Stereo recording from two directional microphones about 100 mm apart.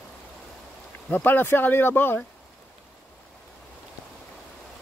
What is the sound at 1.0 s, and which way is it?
Speech, 20° left (ahead or behind).